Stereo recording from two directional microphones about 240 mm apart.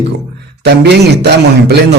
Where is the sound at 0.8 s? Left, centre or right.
Right.